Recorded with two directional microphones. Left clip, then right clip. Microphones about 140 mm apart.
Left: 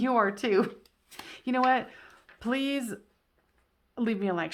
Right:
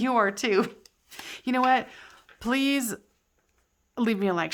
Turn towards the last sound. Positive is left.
turn(degrees=-35)  # may be behind; listen again after turning